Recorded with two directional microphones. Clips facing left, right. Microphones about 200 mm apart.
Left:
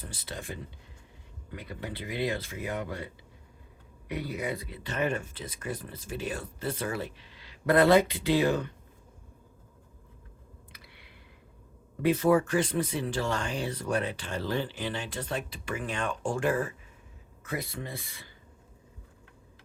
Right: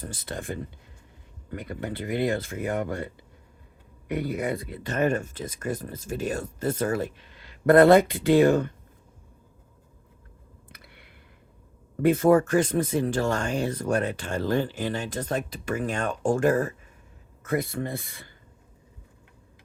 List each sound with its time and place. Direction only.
0.0 s speech: 50° right (ahead or behind)
4.1 s speech: 50° right (ahead or behind)
10.7 s a sound: 50° right (ahead or behind)
12.0 s speech: 50° right (ahead or behind)